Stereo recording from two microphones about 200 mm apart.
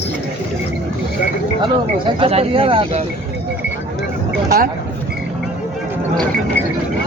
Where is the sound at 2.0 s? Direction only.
30° right (ahead or behind).